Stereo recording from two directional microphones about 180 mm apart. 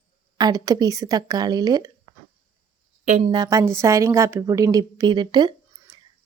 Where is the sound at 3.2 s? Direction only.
20° right (ahead or behind).